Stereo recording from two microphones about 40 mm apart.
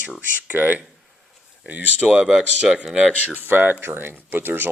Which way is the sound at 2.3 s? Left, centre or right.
Centre.